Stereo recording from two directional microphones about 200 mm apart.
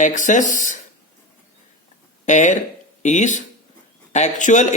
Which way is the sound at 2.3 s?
40° left (ahead or behind).